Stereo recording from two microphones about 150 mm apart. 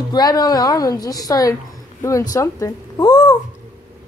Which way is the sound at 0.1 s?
25° left (ahead or behind).